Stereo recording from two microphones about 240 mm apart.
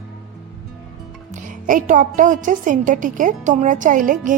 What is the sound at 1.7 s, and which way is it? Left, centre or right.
A woman's voice, right.